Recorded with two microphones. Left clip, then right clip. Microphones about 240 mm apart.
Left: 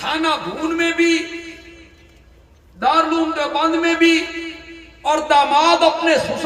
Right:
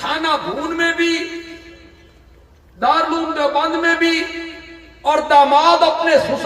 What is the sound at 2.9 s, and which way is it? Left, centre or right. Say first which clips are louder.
A man's voice: left 1 dB; left.